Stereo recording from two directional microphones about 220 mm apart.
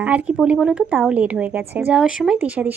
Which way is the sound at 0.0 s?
5° right (ahead or behind).